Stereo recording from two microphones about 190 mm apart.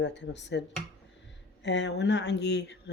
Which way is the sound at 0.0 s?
65° left (ahead or behind).